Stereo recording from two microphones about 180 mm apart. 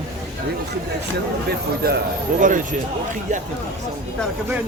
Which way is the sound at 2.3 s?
45° right (ahead or behind).